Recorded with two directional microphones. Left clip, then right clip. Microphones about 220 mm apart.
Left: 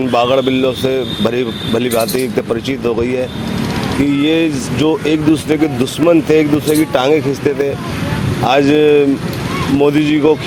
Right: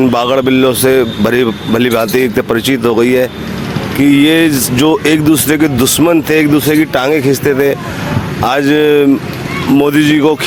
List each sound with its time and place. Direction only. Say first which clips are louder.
0.0 s speech: right 2 dB; 40° right (ahead or behind)